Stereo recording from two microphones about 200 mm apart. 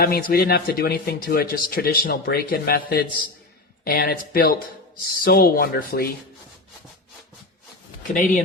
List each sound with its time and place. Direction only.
0.0 s speech: 50° left (ahead or behind)
8.1 s speech: 40° left (ahead or behind)